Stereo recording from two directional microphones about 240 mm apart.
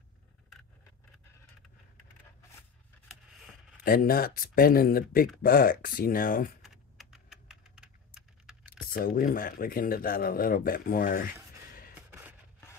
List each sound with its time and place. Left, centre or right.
3.8 s speech: left
6.6 s typing: centre
8.6 s speech: left
11.9 s a sound: centre